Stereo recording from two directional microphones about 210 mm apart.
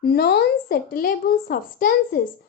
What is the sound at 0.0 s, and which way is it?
A woman's voice, 50° left (ahead or behind).